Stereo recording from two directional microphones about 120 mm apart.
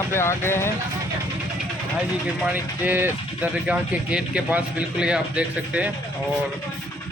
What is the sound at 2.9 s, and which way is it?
Speech, 15° right (ahead or behind).